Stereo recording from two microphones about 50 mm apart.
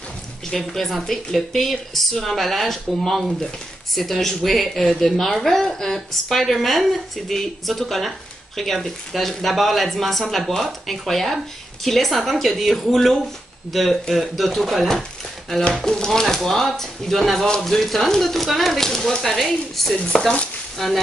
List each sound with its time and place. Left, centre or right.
0.5 s a woman's voice: centre
15.8 s a woman's voice: centre
20.2 s speech: centre
20.7 s speech: centre